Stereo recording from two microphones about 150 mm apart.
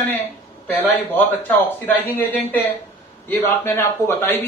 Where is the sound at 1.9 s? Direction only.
15° left (ahead or behind).